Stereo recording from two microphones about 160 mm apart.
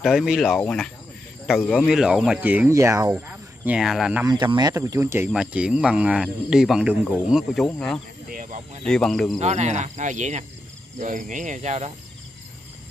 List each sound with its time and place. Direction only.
0.0 s speech: 5° right (ahead or behind)
1.9 s speech: 5° right (ahead or behind)
3.2 s speech: 5° right (ahead or behind)
4.3 s speech: 25° right (ahead or behind); by 8.0 s centre (ahead or behind)
8.3 s speech: 55° right (ahead or behind)
8.8 s speech: 5° left (ahead or behind)
9.4 s speech: 45° right (ahead or behind)